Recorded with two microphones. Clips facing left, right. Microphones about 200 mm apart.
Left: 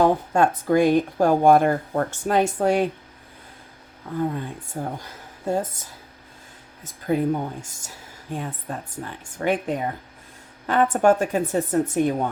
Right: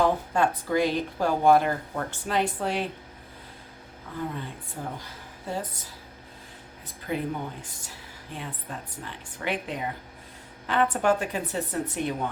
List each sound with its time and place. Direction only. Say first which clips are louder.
0.0 s speech: left 5 dB; 50° left (ahead or behind)
4.2 s speech: left 7 dB; 45° left (ahead or behind)